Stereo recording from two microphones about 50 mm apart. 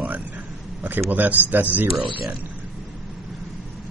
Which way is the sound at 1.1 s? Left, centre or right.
Right.